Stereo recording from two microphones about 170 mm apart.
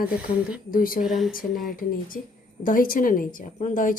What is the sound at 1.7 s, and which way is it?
Speech, 55° left (ahead or behind).